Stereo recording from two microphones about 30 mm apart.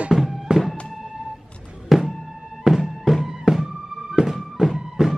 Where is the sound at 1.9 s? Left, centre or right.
Centre.